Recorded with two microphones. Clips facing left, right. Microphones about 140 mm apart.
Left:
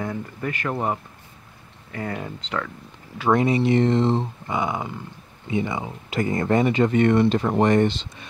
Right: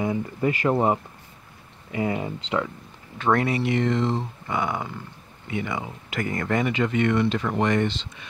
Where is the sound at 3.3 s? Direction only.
20° left (ahead or behind).